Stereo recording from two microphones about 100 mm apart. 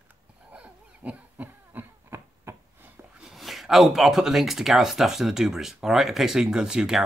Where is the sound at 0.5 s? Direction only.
15° right (ahead or behind).